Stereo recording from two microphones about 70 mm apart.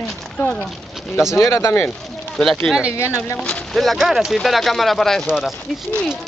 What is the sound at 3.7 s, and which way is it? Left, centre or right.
Speech, centre.